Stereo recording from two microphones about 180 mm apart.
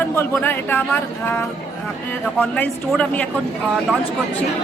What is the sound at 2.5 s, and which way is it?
Speech, 5° left (ahead or behind).